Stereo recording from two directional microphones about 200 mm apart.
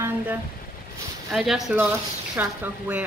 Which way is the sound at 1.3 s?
Centre (ahead or behind).